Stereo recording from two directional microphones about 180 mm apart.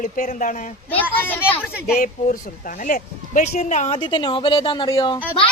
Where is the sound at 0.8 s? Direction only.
10° left (ahead or behind).